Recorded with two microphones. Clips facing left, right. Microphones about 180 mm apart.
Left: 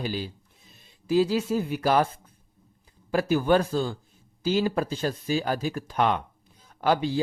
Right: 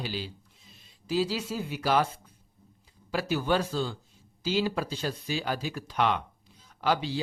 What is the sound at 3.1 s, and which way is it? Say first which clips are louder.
Speech: left 6 dB; 50° left (ahead or behind).